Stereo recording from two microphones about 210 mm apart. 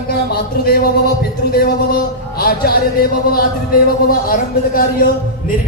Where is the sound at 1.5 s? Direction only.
45° left (ahead or behind).